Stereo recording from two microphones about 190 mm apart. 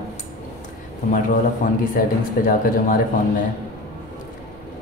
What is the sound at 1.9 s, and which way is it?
Speech, 45° left (ahead or behind).